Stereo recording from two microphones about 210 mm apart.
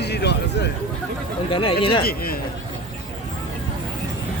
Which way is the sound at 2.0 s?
45° left (ahead or behind).